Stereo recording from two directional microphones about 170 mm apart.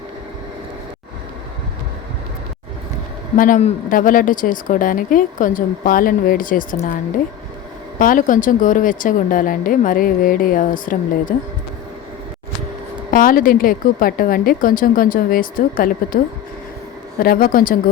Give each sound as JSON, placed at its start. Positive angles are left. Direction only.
{"t": 3.3, "sound": "a woman's voice", "side_deg": 55}
{"t": 13.1, "sound": "a woman's voice", "side_deg": 55}
{"t": 17.2, "sound": "a woman's voice", "side_deg": 55}